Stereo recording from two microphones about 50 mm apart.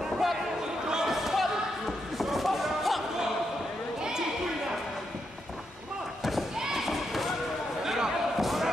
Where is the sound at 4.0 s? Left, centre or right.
Centre.